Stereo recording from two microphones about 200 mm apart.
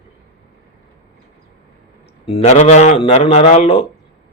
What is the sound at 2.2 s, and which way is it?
A man's voice, 30° left (ahead or behind).